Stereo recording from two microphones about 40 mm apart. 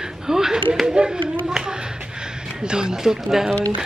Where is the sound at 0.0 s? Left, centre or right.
Centre.